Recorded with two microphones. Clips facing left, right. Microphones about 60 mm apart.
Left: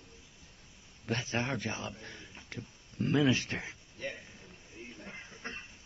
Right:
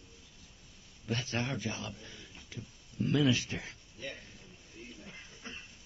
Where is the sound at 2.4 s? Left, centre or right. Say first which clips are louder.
Left 4 dB; left.